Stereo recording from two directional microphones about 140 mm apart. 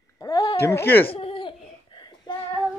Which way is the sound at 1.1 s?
40° left (ahead or behind).